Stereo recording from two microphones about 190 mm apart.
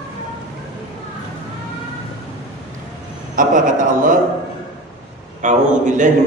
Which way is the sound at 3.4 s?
45° right (ahead or behind).